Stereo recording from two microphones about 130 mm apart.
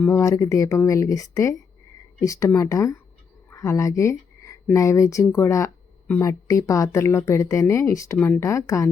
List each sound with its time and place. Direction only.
0.2 s speech: 25° left (ahead or behind)